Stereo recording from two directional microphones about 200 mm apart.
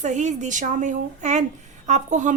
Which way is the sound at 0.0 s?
35° right (ahead or behind).